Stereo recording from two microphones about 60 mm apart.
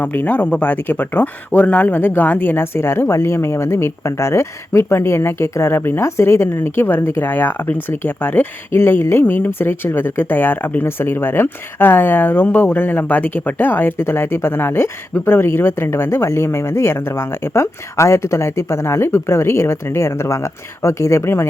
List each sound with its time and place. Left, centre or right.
0.0 s speech: left
2.7 s speech: left
8.7 s speech: left